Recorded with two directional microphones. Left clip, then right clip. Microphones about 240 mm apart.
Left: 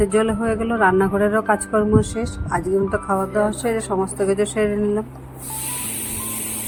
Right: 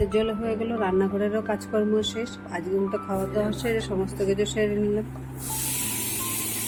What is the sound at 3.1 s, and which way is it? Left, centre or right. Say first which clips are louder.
Speech: left 7 dB; centre.